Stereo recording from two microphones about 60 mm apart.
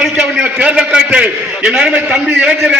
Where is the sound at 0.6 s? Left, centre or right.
Centre.